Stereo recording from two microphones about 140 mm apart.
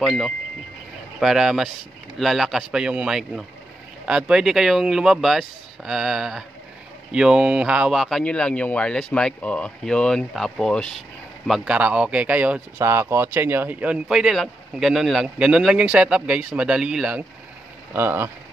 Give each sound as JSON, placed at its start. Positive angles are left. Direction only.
{"t": 0.0, "sound": "speech", "side_deg": 0}
{"t": 17.9, "sound": "speech", "side_deg": -15}